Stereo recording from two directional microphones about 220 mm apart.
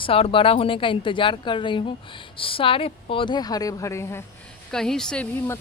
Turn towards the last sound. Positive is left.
turn(degrees=10)  # may be behind; listen again after turning